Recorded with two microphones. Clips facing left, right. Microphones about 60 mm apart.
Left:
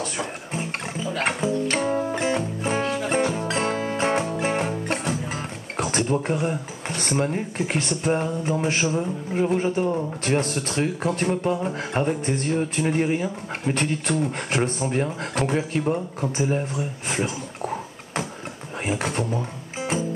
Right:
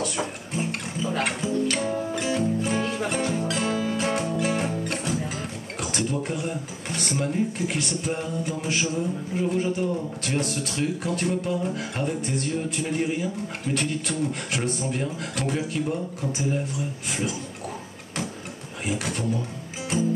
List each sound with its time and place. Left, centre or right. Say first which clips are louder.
0.0 s music: right 1 dB; left
5.8 s a sound: left 5 dB; left
7.0 s speech: left 1 dB; left
18.9 s speech: left 2 dB; left